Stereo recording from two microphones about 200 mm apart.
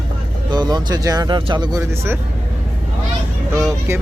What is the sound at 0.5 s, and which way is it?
Speech, 20° right (ahead or behind).